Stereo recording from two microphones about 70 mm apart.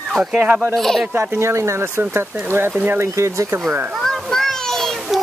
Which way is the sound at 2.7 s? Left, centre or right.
Right.